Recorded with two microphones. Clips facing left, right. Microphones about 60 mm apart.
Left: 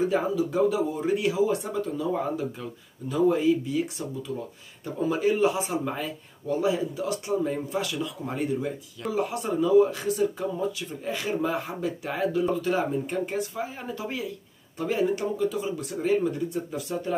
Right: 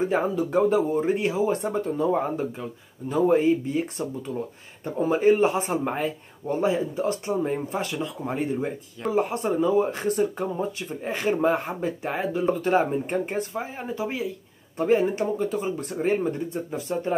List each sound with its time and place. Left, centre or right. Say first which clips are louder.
0.0 s speech: right 1 dB; right
12.4 s speech: right 4 dB; right
14.8 s speech: right 4 dB; right